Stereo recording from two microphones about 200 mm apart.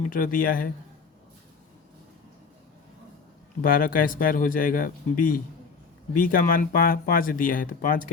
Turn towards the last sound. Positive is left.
turn(degrees=45)  # may be behind; listen again after turning